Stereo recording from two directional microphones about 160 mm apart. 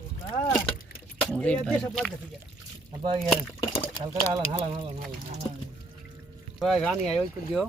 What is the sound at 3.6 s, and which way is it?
Speech, 30° left (ahead or behind).